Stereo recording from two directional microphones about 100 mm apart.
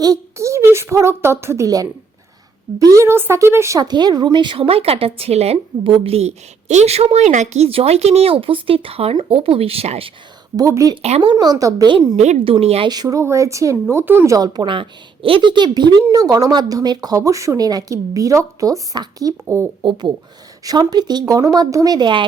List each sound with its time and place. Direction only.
0.0 s a woman's voice: 35° right (ahead or behind)
2.9 s speech: 25° right (ahead or behind)
3.8 s a woman's voice: 45° right (ahead or behind); by 10.1 s 85° right
10.6 s speech: 35° right (ahead or behind)
10.9 s speech: 75° right (ahead or behind)
11.3 s speech: 40° right (ahead or behind)
12.1 s speech: 85° right
12.9 s speech: 40° right (ahead or behind)
13.9 s speech: 20° right (ahead or behind)
14.3 s a woman's voice: 40° right (ahead or behind)
19.8 s a woman's voice: 50° right (ahead or behind)